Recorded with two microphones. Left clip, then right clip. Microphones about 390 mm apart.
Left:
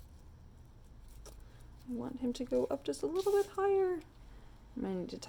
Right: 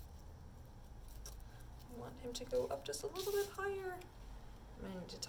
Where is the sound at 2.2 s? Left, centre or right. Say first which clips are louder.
Left 5 dB; centre.